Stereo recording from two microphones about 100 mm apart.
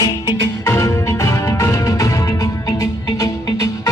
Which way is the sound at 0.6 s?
30° left (ahead or behind).